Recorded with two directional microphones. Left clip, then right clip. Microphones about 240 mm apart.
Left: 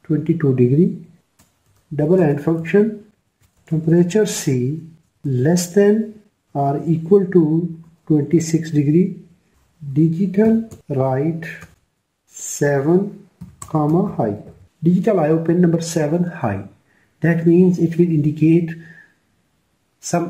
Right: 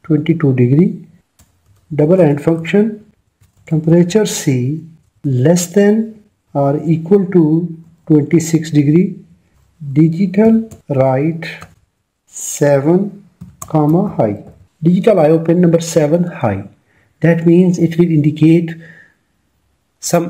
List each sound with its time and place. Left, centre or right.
0.0 s speech: right
2.0 s speech: right
12.5 s speech: right
20.0 s speech: right